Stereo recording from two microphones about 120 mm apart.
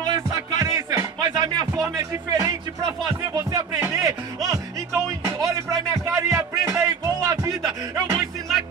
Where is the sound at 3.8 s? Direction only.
20° right (ahead or behind).